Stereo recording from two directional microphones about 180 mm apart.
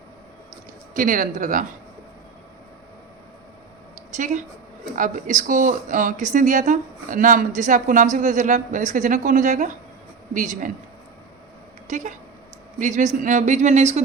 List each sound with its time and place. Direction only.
0.9 s a woman's voice: 45° right (ahead or behind)
4.9 s a woman's voice: 45° right (ahead or behind)
11.9 s a woman's voice: 40° right (ahead or behind)